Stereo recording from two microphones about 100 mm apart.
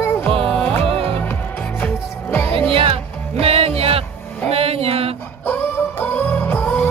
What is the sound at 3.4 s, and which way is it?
Music, 80° right.